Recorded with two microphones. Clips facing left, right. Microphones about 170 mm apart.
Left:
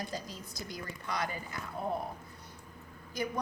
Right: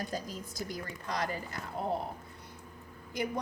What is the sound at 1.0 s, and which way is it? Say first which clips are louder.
Speech: right 1 dB; 40° right (ahead or behind).